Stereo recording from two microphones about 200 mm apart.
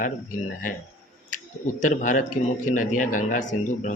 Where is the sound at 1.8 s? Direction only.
40° left (ahead or behind).